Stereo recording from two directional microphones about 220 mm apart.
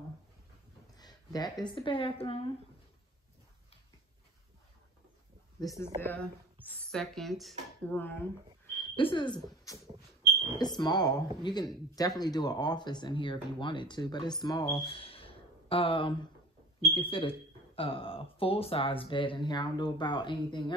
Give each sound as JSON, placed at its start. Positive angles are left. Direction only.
{"t": 0.9, "sound": "speech", "side_deg": 20}
{"t": 5.9, "sound": "speech", "side_deg": 10}
{"t": 8.9, "sound": "speech", "side_deg": 20}
{"t": 14.8, "sound": "a sound", "side_deg": 25}
{"t": 16.9, "sound": "speech", "side_deg": 25}